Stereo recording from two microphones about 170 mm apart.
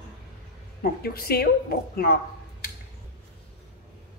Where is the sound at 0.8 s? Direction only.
65° left (ahead or behind).